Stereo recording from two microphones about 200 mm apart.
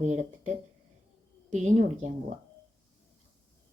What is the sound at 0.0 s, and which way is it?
Speech, 35° right (ahead or behind).